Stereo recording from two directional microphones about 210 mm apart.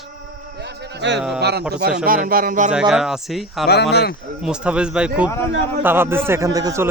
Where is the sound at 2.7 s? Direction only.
Centre (ahead or behind).